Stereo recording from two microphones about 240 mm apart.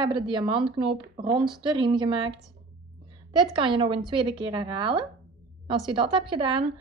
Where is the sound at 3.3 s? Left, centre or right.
Right.